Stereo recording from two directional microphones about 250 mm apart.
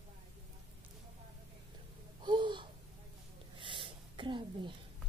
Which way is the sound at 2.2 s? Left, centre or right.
Centre.